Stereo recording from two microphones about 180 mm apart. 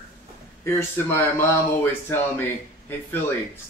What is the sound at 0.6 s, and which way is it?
Speech, 15° left (ahead or behind).